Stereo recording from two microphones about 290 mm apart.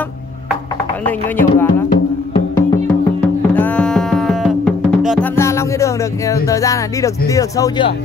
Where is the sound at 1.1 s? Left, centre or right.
Centre.